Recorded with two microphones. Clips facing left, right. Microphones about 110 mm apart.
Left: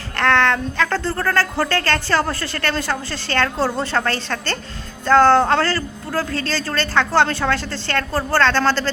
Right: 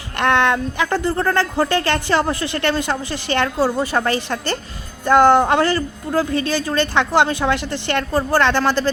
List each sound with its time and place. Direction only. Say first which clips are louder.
0.2 s speech: right 1 dB; 15° right (ahead or behind)